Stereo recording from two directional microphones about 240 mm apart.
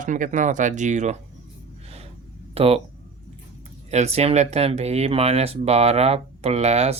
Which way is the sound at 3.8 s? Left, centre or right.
Right.